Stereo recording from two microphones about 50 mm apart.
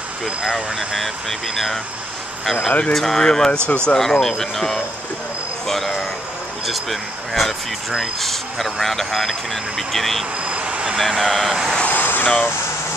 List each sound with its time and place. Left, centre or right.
0.4 s speech: centre
3.6 s speech: left
3.9 s speech: centre
10.4 s vehicle: right
11.0 s speech: centre
11.8 s vehicle: left